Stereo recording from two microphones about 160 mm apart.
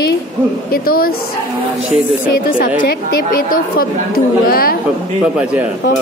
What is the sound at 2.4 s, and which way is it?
A woman's voice, 65° left (ahead or behind).